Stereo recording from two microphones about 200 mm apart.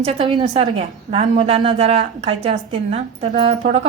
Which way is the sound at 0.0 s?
25° right (ahead or behind).